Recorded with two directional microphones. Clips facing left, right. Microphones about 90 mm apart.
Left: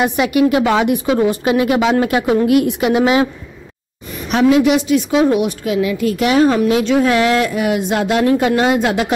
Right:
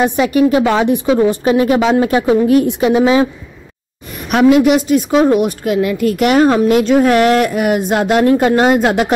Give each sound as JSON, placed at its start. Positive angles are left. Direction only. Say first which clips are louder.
{"t": 0.0, "sound": "a woman's voice", "louder": "right 2 dB", "side_deg": -30}
{"t": 4.3, "sound": "a woman's voice", "louder": "right 3 dB", "side_deg": -55}